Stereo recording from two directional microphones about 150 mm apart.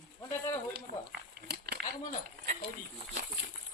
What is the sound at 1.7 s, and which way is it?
Keys jangling, 90° right.